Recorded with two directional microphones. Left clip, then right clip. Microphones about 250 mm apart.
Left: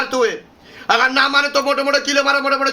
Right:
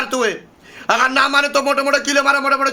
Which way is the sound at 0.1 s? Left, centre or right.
Right.